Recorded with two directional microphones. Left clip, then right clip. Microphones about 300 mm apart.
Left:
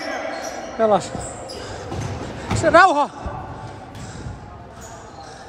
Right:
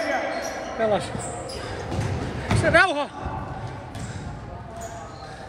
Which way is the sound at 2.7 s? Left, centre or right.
Centre.